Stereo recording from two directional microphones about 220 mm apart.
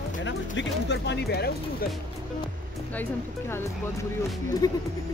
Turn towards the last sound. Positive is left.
turn(degrees=15)  # may be behind; listen again after turning